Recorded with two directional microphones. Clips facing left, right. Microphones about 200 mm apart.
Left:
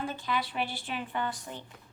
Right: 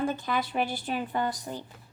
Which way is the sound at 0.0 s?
45° right (ahead or behind).